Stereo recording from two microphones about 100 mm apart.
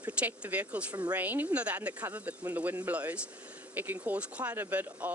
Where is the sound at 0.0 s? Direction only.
15° right (ahead or behind).